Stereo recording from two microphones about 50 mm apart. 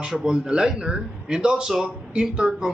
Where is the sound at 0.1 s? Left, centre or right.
Centre.